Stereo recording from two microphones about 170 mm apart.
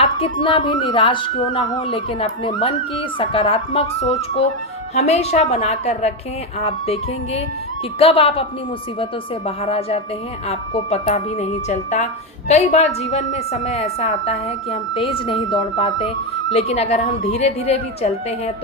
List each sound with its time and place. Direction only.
0.0 s a woman's voice: 30° left (ahead or behind)
9.6 s a woman's voice: 35° left (ahead or behind)